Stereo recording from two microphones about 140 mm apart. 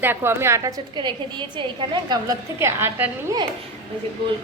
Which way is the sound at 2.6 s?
20° right (ahead or behind).